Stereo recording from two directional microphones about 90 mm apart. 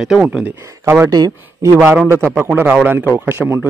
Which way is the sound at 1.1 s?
45° right (ahead or behind).